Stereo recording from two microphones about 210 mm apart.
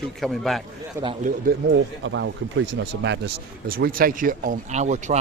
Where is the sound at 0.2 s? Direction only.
Centre (ahead or behind).